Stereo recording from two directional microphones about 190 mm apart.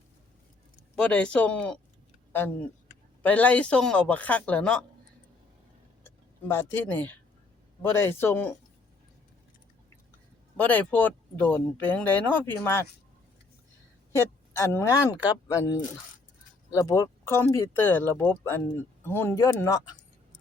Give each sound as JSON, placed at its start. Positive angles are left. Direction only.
{"t": 0.9, "sound": "speech", "side_deg": 5}
{"t": 6.5, "sound": "speech", "side_deg": 10}
{"t": 10.6, "sound": "speech", "side_deg": 10}
{"t": 14.1, "sound": "speech", "side_deg": 15}